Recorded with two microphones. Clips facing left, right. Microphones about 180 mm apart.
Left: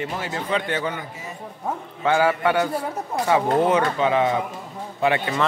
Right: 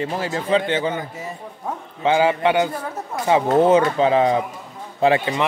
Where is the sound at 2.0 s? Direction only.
20° right (ahead or behind).